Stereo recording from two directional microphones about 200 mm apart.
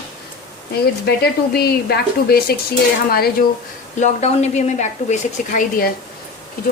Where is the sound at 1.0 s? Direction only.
55° left (ahead or behind).